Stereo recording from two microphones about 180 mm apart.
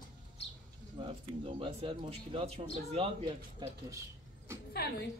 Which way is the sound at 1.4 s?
30° right (ahead or behind).